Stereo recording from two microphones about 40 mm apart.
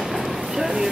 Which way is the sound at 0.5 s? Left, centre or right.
Centre.